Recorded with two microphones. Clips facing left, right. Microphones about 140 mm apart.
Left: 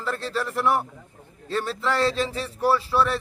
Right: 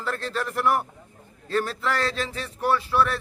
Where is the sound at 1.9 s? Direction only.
30° left (ahead or behind).